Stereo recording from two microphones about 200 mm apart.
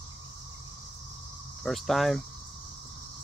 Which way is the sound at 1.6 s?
Centre (ahead or behind).